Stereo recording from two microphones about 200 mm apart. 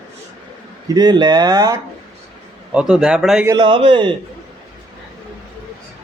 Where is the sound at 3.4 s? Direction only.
25° right (ahead or behind).